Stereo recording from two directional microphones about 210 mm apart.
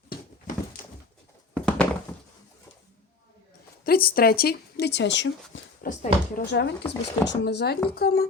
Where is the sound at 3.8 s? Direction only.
45° left (ahead or behind).